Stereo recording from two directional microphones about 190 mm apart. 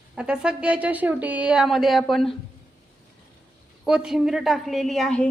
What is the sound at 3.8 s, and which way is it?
Speech, 5° right (ahead or behind).